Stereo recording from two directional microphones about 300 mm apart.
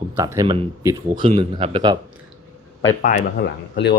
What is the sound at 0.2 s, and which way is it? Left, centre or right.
Speech, centre.